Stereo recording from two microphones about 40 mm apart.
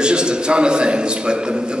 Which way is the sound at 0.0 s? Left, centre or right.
Right.